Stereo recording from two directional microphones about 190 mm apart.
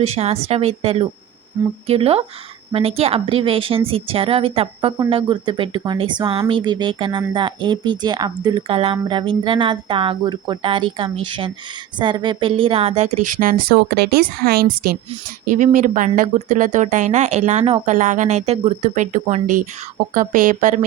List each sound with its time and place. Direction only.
0.0 s speech: 35° right (ahead or behind)